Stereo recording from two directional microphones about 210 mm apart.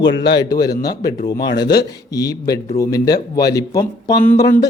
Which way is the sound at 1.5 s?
50° left (ahead or behind).